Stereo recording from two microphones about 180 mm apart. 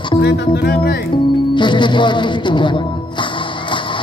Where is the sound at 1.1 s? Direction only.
25° left (ahead or behind).